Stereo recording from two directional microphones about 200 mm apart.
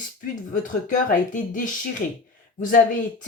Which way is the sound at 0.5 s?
40° left (ahead or behind).